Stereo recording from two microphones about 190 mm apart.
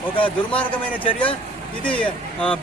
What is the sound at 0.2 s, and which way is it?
Speech, 25° left (ahead or behind).